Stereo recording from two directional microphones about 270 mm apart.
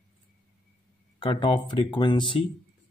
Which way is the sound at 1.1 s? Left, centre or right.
Centre.